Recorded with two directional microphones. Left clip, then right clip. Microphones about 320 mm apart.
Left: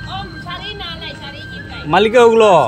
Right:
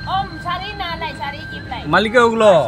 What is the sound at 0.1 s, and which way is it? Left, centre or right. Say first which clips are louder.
Vehicle: right 7 dB; centre.